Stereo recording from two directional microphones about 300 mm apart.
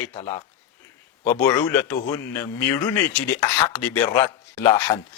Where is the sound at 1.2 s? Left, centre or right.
Centre.